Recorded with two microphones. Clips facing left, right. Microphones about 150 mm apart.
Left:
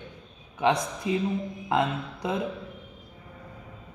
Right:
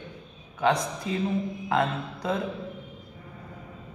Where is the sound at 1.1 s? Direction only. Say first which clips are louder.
Left 1 dB; 15° left (ahead or behind).